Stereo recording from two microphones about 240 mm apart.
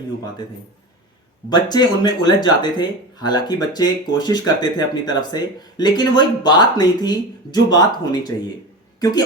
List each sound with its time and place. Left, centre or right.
1.5 s speech: centre